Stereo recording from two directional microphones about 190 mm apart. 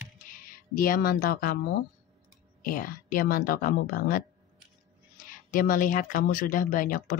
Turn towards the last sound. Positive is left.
turn(degrees=50)  # may be behind; listen again after turning